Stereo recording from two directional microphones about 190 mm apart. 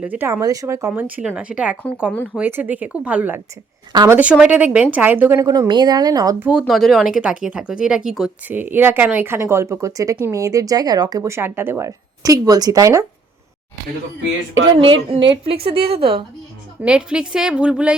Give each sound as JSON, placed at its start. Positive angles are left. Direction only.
{"t": 0.0, "sound": "speech", "side_deg": -10}
{"t": 4.2, "sound": "speech", "side_deg": -5}
{"t": 6.4, "sound": "speech", "side_deg": -5}
{"t": 15.1, "sound": "a woman's voice", "side_deg": -30}
{"t": 16.8, "sound": "a woman's voice", "side_deg": -5}